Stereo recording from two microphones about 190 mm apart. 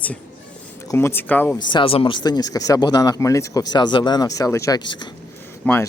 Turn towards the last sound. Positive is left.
turn(degrees=10)  # may be behind; listen again after turning